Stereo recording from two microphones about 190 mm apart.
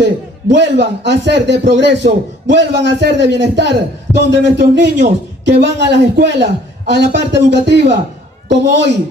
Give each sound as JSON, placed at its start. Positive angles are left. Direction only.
{"t": 0.0, "sound": "a man's voice", "side_deg": -65}